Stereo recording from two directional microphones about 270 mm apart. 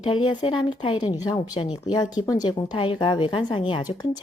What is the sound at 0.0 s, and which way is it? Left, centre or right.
A woman's voice, centre.